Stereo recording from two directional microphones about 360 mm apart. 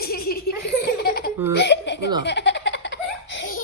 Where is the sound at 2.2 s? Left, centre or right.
Left.